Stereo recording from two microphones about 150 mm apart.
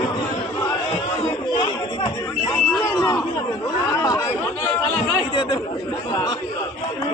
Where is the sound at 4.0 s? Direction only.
25° left (ahead or behind).